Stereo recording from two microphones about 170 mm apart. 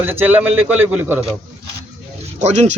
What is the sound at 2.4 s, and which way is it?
Speech, 40° right (ahead or behind).